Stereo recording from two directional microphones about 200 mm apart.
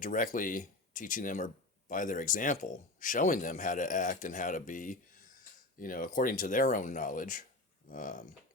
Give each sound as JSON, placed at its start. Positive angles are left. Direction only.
{"t": 0.0, "sound": "speech", "side_deg": 40}